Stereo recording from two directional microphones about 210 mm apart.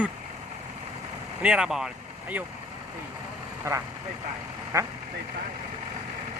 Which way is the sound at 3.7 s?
15° right (ahead or behind).